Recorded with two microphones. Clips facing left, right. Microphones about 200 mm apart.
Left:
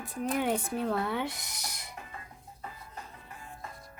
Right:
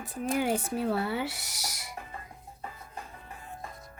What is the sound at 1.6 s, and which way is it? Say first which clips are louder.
Owl: right 2 dB; 85° right.